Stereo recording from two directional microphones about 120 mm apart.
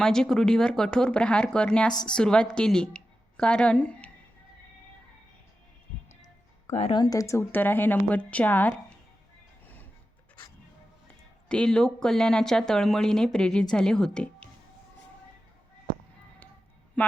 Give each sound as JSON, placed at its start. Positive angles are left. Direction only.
{"t": 0.0, "sound": "a woman's voice", "side_deg": 5}
{"t": 6.7, "sound": "speech", "side_deg": 65}
{"t": 6.9, "sound": "speech", "side_deg": 30}
{"t": 11.4, "sound": "speech", "side_deg": 5}
{"t": 17.0, "sound": "speech", "side_deg": 10}